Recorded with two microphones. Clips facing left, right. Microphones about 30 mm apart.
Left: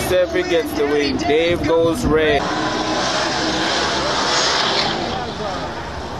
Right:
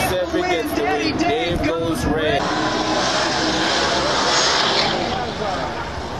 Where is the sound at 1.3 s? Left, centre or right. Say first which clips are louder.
Left 5 dB; left.